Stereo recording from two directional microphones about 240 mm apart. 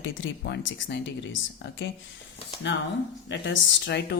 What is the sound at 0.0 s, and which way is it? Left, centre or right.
Speech, left.